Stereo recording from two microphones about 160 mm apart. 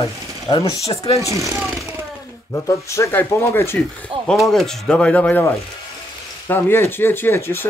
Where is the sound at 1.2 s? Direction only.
20° right (ahead or behind).